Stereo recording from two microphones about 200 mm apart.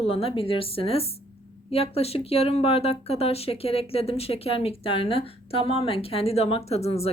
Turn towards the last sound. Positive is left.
turn(degrees=30)  # may be behind; listen again after turning